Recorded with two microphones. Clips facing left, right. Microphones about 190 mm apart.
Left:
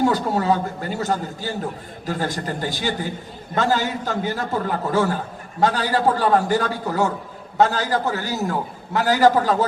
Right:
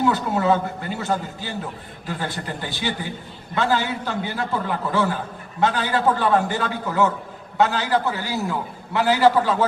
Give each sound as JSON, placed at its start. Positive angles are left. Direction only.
{"t": 0.0, "sound": "a man's voice", "side_deg": 40}